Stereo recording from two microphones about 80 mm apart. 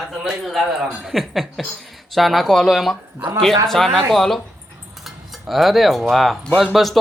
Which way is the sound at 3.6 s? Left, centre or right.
Centre.